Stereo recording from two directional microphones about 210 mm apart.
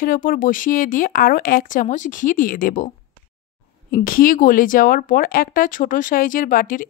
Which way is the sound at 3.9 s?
40° left (ahead or behind).